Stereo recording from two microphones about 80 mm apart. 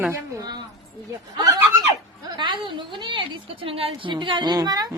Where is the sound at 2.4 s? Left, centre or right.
Right.